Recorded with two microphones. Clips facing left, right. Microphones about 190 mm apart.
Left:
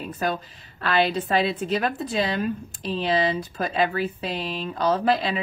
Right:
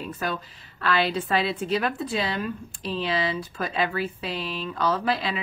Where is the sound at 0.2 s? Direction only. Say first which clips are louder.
Left 6 dB; 45° left (ahead or behind).